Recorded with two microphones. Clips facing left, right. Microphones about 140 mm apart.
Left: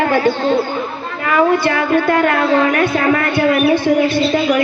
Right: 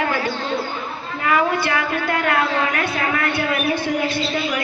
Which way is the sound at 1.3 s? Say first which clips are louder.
Left 6 dB; 45° left (ahead or behind).